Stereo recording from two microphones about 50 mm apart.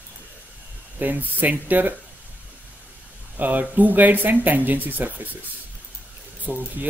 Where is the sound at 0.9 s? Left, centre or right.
Right.